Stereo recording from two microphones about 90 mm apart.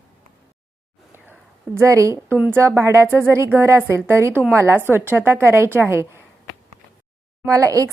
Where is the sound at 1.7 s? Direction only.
35° right (ahead or behind).